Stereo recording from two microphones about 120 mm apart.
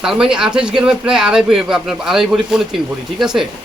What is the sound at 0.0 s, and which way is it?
Speech, 5° right (ahead or behind).